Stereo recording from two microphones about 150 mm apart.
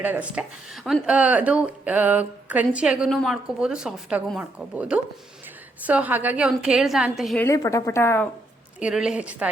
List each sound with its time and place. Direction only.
0.0 s a woman's voice: 10° right (ahead or behind)
7.3 s a woman's voice: 20° left (ahead or behind)
8.8 s a woman's voice: 5° right (ahead or behind)